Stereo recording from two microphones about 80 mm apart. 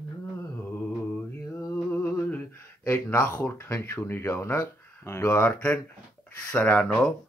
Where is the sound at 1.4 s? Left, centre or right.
Left.